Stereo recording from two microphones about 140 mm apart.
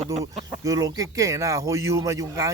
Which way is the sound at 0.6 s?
25° right (ahead or behind).